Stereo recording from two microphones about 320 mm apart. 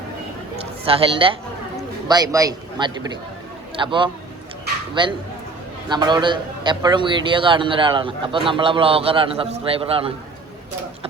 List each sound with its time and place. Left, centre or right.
0.6 s a man's voice: centre
5.9 s a man's voice: centre